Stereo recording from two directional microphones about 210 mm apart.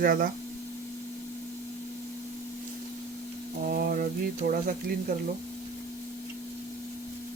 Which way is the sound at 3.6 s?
40° right (ahead or behind).